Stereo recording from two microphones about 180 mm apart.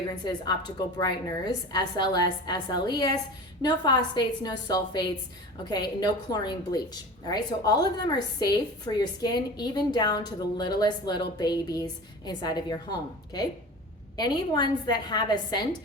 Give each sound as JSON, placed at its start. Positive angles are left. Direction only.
{"t": 0.3, "sound": "a woman's voice", "side_deg": 25}
{"t": 14.2, "sound": "a woman's voice", "side_deg": 25}